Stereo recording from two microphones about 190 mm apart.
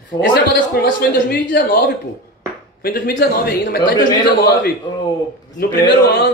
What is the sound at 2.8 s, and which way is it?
Speech, 50° left (ahead or behind).